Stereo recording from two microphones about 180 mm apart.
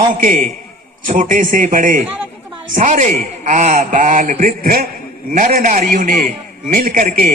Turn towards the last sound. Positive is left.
turn(degrees=-50)  # may be behind; listen again after turning